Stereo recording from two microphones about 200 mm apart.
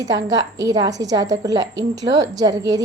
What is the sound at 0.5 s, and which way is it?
A woman's voice, 20° right (ahead or behind).